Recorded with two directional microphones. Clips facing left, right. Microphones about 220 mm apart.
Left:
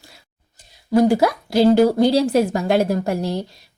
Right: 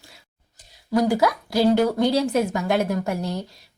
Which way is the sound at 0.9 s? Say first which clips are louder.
Left 4 dB; 30° left (ahead or behind).